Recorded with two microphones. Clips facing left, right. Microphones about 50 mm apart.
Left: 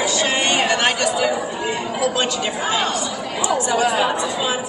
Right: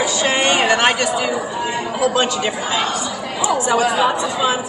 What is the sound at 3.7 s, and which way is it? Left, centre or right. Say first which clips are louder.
Speech: right 2 dB; centre.